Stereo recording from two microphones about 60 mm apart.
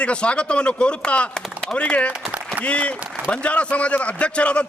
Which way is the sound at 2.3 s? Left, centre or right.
Right.